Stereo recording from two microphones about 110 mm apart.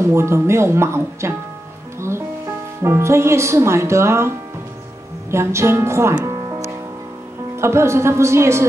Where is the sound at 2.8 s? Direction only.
25° right (ahead or behind).